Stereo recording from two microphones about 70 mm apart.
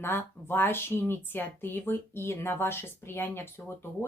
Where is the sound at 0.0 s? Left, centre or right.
Left.